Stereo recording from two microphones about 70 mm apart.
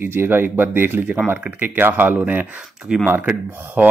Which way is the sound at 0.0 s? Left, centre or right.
Right.